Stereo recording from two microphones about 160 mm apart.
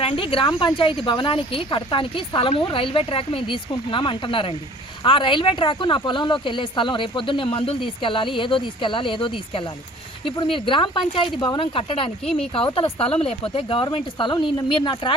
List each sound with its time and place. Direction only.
0.0 s speech: 35° left (ahead or behind)